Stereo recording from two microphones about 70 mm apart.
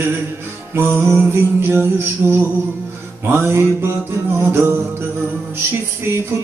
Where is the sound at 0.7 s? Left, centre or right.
Right.